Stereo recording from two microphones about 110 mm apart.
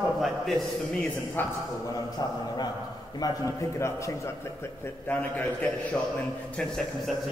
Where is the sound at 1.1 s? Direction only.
20° left (ahead or behind).